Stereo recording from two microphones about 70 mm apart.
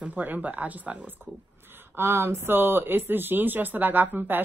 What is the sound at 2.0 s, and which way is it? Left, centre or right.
Speech, right.